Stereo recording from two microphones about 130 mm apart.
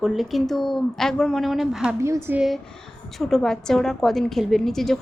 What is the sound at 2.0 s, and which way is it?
Speech, 20° right (ahead or behind).